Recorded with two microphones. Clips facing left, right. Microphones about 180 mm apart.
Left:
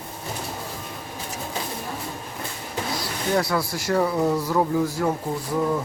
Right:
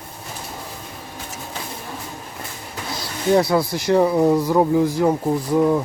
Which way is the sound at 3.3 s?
20° right (ahead or behind).